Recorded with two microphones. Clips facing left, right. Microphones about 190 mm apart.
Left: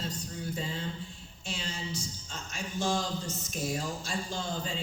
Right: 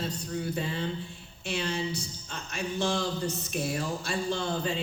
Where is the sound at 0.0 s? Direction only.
60° right (ahead or behind).